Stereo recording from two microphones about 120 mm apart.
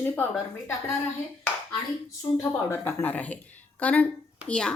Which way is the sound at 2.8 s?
15° left (ahead or behind).